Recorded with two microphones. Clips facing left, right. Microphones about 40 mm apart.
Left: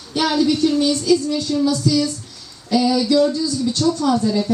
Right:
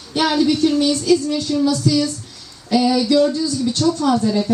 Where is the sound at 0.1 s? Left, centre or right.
Right.